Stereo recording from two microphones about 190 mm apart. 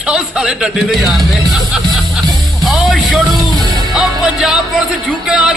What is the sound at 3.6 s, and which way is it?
Music, 20° right (ahead or behind).